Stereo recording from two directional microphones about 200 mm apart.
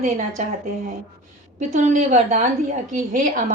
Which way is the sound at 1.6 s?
35° right (ahead or behind).